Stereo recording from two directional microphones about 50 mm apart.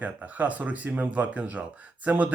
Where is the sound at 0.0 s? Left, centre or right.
Right.